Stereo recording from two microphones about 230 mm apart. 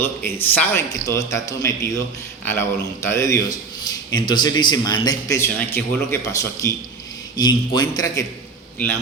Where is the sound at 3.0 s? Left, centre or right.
Centre.